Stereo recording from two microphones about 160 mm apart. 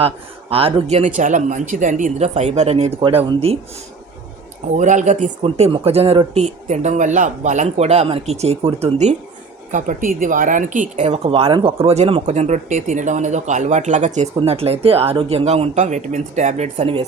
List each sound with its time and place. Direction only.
0.5 s speech: 35° right (ahead or behind)
4.7 s speech: 50° right (ahead or behind)
9.7 s speech: 55° right (ahead or behind)
14.3 s speech: 40° right (ahead or behind)